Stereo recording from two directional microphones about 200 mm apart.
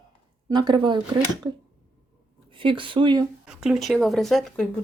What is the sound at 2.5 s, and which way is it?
Speech, 25° right (ahead or behind).